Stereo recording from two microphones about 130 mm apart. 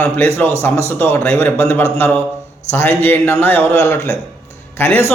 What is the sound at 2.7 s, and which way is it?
A man's voice, 15° left (ahead or behind).